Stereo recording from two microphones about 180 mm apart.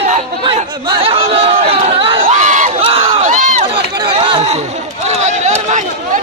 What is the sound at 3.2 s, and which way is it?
Run, 45° right (ahead or behind).